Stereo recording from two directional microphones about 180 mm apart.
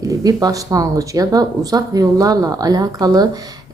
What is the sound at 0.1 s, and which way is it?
Speech, 20° right (ahead or behind).